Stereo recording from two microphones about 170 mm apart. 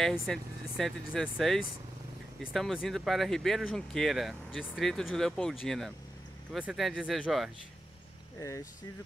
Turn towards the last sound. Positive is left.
turn(degrees=0)  # may be behind; listen again after turning